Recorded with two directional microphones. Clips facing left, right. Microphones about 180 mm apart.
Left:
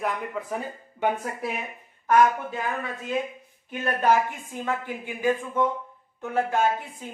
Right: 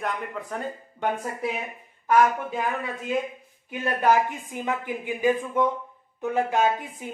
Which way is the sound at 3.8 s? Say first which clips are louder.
Right 1 dB; 15° right (ahead or behind).